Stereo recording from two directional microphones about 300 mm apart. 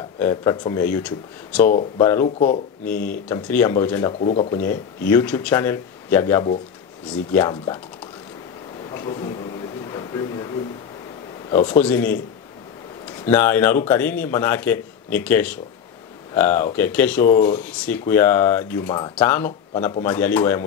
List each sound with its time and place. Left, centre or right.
0.2 s speech: centre
2.2 s speech: left
2.8 s speech: centre
4.2 s speech: centre
4.6 s speech: centre
8.9 s a sound: centre
11.5 s speech: centre
13.2 s speech: centre